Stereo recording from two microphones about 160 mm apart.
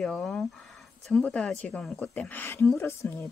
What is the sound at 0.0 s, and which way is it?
A woman's voice, 5° left (ahead or behind).